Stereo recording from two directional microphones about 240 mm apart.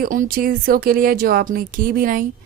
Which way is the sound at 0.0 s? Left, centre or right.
Right.